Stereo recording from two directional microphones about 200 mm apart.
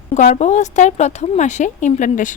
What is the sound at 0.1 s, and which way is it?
A woman's voice, 35° left (ahead or behind).